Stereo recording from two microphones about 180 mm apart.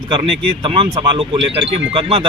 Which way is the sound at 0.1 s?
30° right (ahead or behind).